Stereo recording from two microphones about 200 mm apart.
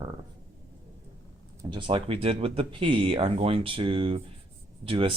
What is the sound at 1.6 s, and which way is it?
Speech, 25° right (ahead or behind).